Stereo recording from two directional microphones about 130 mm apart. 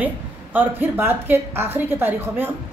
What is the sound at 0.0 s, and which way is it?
A woman's voice, 15° right (ahead or behind).